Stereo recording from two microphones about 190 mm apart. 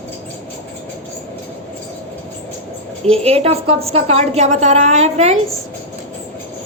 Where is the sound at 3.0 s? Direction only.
30° right (ahead or behind).